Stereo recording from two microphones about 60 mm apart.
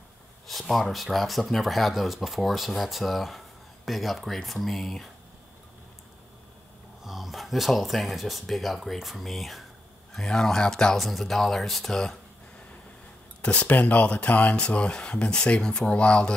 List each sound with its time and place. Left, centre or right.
0.5 s speech: centre
7.1 s speech: centre
13.4 s speech: left